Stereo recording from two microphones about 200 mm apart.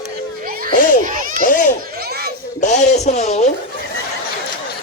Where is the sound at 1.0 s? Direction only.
40° right (ahead or behind).